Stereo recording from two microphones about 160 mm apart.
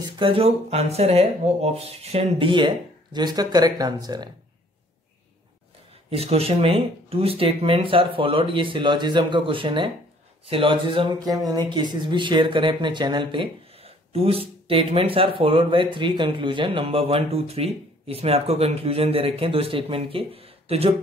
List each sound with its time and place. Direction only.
0.0 s speech: 35° right (ahead or behind)
6.0 s speech: 40° right (ahead or behind)